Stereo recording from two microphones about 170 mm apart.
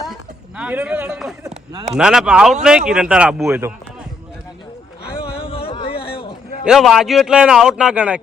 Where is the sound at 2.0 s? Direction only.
5° right (ahead or behind).